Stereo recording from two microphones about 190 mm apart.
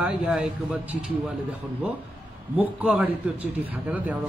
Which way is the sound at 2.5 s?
5° right (ahead or behind).